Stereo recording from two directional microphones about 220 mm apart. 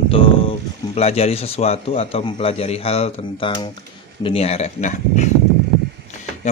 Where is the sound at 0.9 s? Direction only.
30° left (ahead or behind).